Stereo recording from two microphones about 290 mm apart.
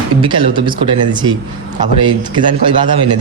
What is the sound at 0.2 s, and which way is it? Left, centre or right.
Speech, centre.